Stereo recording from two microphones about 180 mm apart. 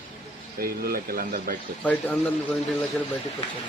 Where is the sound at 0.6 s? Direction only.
55° right (ahead or behind).